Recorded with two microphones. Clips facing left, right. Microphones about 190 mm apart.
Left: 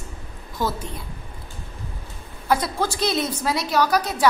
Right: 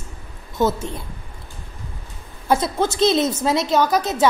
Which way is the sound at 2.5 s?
25° right (ahead or behind).